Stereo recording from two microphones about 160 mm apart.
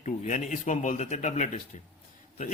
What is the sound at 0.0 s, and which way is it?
A man's voice, 50° left (ahead or behind).